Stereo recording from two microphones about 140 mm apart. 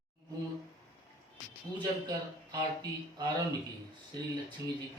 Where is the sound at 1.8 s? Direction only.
30° right (ahead or behind).